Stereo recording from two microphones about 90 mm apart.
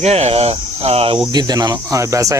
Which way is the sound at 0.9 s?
90° right.